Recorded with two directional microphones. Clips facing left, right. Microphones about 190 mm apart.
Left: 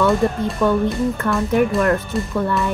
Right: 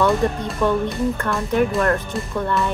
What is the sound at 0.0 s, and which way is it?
Speech, centre (ahead or behind).